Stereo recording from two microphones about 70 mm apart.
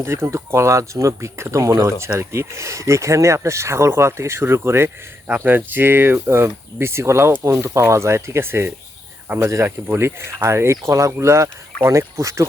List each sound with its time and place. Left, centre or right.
0.0 s speech: right